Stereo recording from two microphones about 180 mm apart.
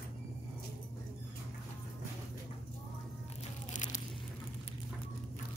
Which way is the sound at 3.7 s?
45° left (ahead or behind).